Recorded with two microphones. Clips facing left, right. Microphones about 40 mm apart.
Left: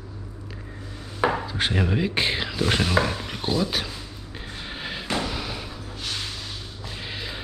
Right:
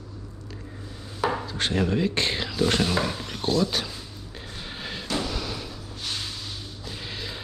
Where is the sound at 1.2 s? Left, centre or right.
Left.